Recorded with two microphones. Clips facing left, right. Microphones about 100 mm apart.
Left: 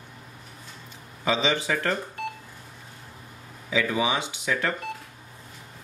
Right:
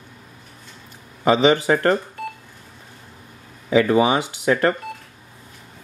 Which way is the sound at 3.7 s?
50° right (ahead or behind).